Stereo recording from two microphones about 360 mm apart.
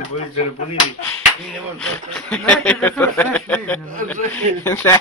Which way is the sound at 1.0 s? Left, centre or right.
Centre.